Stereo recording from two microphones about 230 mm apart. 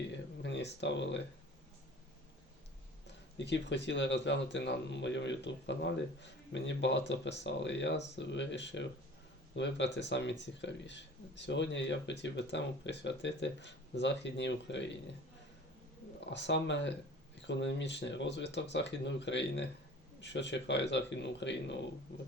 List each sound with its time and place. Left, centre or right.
0.4 s speech: left
3.3 s speech: left
16.3 s speech: left